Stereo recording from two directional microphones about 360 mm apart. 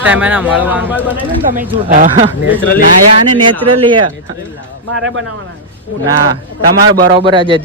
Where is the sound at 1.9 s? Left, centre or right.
Right.